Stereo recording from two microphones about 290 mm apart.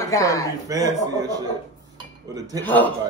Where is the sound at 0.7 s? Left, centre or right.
Centre.